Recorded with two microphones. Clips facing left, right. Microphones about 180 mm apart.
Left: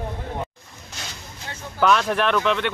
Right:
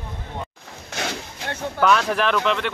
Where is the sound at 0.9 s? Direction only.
75° right (ahead or behind).